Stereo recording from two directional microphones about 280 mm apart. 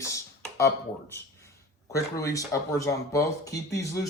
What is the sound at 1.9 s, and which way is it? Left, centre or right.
Speech, centre.